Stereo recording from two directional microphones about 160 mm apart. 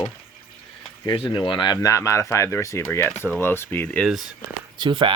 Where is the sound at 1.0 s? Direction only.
35° left (ahead or behind); by 4.0 s 10° left (ahead or behind).